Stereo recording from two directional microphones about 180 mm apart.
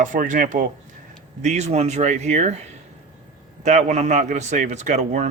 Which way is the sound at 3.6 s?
40° right (ahead or behind).